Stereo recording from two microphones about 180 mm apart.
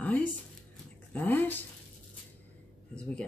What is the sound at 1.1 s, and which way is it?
Speech, 10° left (ahead or behind).